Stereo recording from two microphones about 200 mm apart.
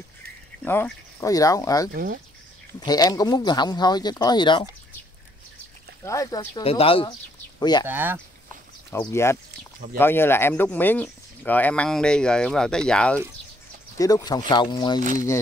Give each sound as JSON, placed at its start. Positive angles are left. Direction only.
{"t": 0.7, "sound": "speech", "side_deg": 10}
{"t": 6.0, "sound": "speech", "side_deg": 15}
{"t": 6.6, "sound": "speech", "side_deg": 30}
{"t": 7.8, "sound": "speech", "side_deg": -10}
{"t": 8.9, "sound": "speech", "side_deg": 15}
{"t": 13.9, "sound": "speech", "side_deg": 15}
{"t": 15.0, "sound": "speech", "side_deg": -40}